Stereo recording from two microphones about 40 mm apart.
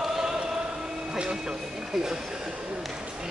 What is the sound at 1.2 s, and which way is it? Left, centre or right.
Speech, centre.